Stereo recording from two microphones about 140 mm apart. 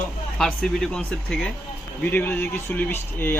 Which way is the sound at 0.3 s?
5° left (ahead or behind).